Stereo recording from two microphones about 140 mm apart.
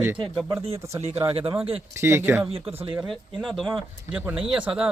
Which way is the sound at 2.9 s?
Centre (ahead or behind).